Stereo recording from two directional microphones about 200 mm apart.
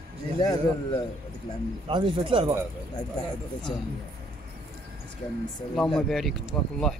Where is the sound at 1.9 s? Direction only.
25° right (ahead or behind).